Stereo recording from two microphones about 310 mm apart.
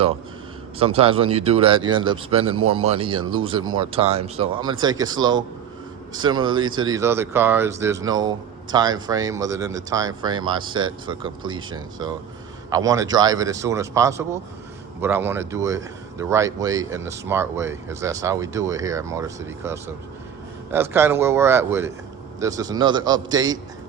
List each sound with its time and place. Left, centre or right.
0.8 s speech: centre
3.2 s speech: right
3.8 s speech: centre